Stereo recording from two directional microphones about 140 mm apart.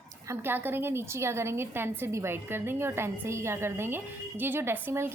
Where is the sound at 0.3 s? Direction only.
15° right (ahead or behind).